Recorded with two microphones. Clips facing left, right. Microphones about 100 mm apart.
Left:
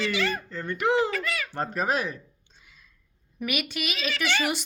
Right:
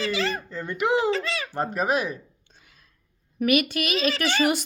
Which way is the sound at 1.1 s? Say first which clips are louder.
Right 3 dB; 25° right (ahead or behind).